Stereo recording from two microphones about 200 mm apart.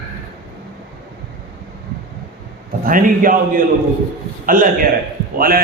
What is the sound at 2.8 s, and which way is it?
A man's voice, 45° right (ahead or behind).